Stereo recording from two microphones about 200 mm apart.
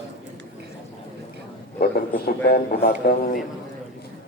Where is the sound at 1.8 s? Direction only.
50° left (ahead or behind).